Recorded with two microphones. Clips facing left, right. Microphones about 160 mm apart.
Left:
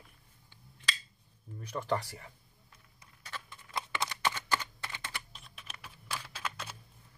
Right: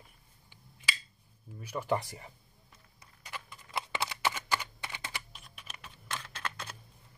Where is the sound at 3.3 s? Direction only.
15° right (ahead or behind).